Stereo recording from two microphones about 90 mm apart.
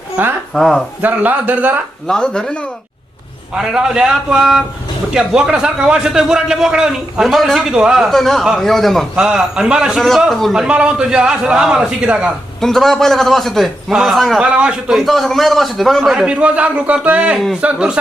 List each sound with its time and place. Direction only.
0.5 s a man's voice: centre (ahead or behind)
1.0 s speech: 20° right (ahead or behind)
2.0 s speech: 5° left (ahead or behind)
3.5 s a man's voice: 10° right (ahead or behind)
9.1 s a man's voice: 10° right (ahead or behind)
10.7 s a man's voice: 10° right (ahead or behind)
12.5 s a man's voice: 5° left (ahead or behind)
14.4 s a man's voice: 10° right (ahead or behind)
16.1 s a man's voice: 10° right (ahead or behind)